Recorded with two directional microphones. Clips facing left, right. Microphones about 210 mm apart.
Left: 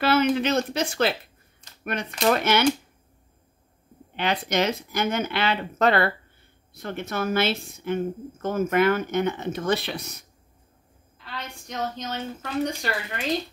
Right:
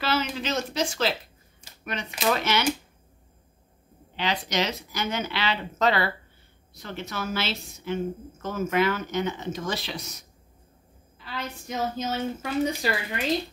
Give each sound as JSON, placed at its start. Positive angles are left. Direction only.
{"t": 0.0, "sound": "a woman's voice", "side_deg": 55}
{"t": 1.6, "sound": "a sound", "side_deg": -10}
{"t": 2.2, "sound": "speech", "side_deg": 55}
{"t": 4.2, "sound": "a woman's voice", "side_deg": 55}
{"t": 11.2, "sound": "a woman's voice", "side_deg": 0}